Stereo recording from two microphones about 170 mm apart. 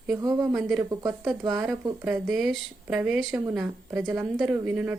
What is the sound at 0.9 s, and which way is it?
Speech, 20° right (ahead or behind).